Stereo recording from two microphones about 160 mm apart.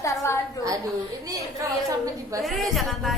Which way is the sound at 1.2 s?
20° right (ahead or behind).